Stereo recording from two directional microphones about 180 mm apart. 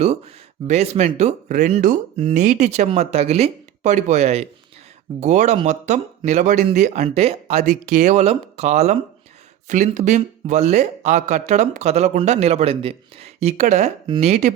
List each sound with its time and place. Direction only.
0.7 s speech: 40° right (ahead or behind)